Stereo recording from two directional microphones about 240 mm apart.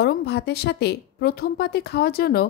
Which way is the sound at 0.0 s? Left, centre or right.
Left.